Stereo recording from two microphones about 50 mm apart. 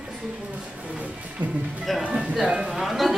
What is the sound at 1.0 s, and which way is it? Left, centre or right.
Speech, right.